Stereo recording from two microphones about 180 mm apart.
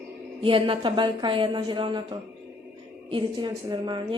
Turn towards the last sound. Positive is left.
turn(degrees=-25)  # may be behind; listen again after turning